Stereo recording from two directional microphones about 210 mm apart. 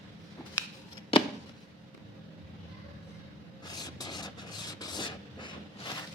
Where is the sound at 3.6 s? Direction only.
20° left (ahead or behind).